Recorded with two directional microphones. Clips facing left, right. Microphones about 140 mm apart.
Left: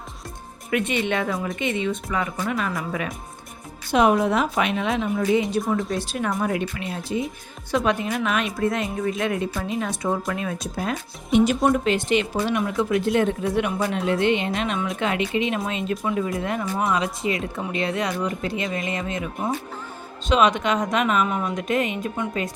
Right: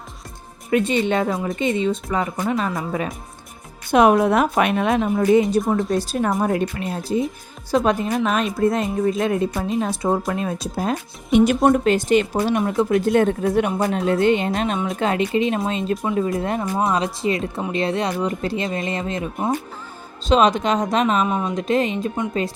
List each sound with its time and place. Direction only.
0.7 s speech: 30° right (ahead or behind)
3.9 s a woman's voice: 55° right (ahead or behind); by 10.9 s 30° right (ahead or behind)
11.3 s a woman's voice: 55° right (ahead or behind); by 22.2 s 30° right (ahead or behind)